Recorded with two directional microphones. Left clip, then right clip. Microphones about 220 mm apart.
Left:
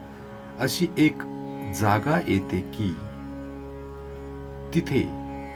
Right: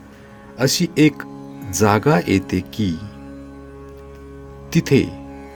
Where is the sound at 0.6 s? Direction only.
50° right (ahead or behind).